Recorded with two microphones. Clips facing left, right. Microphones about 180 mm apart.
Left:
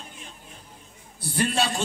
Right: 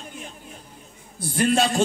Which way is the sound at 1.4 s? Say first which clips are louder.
Right 5 dB; 50° right (ahead or behind).